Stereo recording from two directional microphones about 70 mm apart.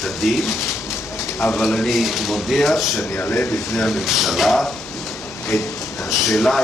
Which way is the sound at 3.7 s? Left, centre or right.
Centre.